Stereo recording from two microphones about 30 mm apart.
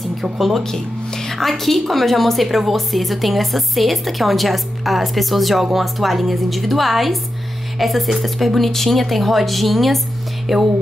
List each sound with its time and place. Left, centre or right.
0.2 s a woman's voice: centre